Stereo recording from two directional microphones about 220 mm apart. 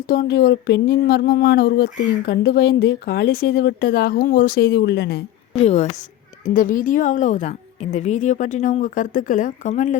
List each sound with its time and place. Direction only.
0.1 s speech: 45° left (ahead or behind)
5.5 s a woman's voice: 30° left (ahead or behind)